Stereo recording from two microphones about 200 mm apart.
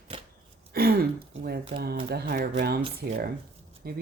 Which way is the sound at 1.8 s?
55° right (ahead or behind).